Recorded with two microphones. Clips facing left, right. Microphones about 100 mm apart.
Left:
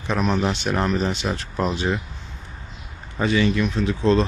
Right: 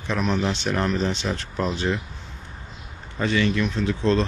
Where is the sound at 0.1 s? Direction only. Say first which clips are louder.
Left 2 dB; 10° left (ahead or behind).